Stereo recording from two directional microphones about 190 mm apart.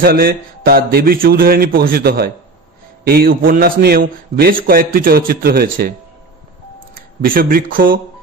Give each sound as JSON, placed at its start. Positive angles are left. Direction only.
{"t": 0.0, "sound": "a man's voice", "side_deg": -50}
{"t": 7.2, "sound": "a man's voice", "side_deg": -50}